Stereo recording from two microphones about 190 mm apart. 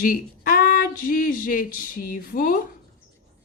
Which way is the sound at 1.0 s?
45° left (ahead or behind).